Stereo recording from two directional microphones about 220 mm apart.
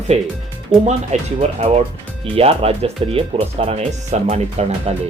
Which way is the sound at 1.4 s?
30° right (ahead or behind).